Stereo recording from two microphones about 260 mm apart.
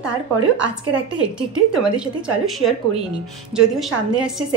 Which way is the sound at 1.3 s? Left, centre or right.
Centre.